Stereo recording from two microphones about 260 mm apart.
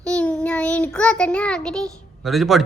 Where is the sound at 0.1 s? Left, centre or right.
Centre.